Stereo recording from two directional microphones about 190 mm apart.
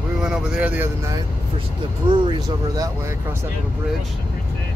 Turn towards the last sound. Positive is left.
turn(degrees=-15)  # may be behind; listen again after turning